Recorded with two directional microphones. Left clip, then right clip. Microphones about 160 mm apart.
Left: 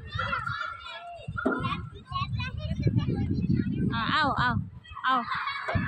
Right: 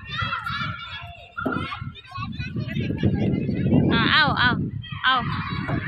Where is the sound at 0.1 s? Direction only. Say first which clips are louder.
Right 4 dB; 35° left (ahead or behind).